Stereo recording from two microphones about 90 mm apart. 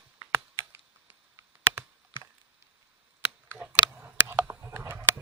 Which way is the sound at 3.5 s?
20° right (ahead or behind).